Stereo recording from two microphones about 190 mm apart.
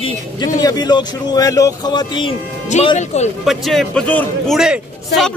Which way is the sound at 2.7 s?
35° left (ahead or behind).